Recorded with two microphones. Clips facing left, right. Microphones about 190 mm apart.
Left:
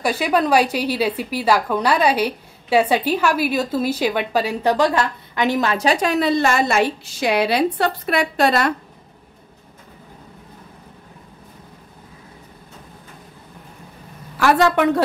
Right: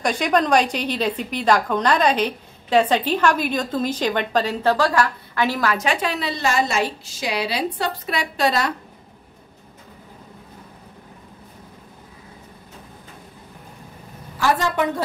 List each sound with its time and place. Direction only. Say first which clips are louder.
0.0 s a woman's voice: left 1 dB; 5° left (ahead or behind); by 5.9 s 25° left (ahead or behind)
5.9 s a woman's voice: left 6 dB; 45° left (ahead or behind)
14.4 s a woman's voice: left 5 dB; 70° left (ahead or behind)